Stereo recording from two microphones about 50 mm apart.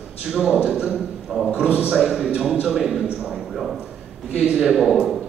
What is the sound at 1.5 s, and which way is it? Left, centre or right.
A man's voice, right.